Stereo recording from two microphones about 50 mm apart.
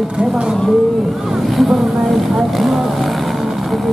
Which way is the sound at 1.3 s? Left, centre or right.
Centre.